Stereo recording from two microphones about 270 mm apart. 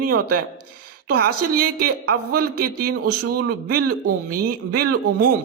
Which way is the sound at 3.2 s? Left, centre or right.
Right.